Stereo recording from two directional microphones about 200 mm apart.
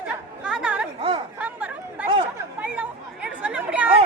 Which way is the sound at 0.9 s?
25° right (ahead or behind).